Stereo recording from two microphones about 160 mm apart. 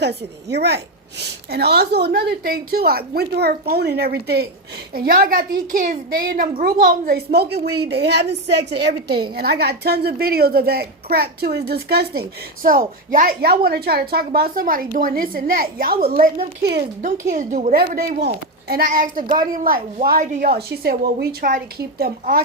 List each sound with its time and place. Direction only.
0.0 s a woman's voice: 90° right
4.9 s a woman's voice: 65° right (ahead or behind)
12.6 s a woman's voice: 55° right (ahead or behind)
16.2 s a woman's voice: 75° right (ahead or behind)
17.0 s a woman's voice: 50° right (ahead or behind)
20.6 s a woman's voice: 85° right; by 22.4 s 65° right (ahead or behind)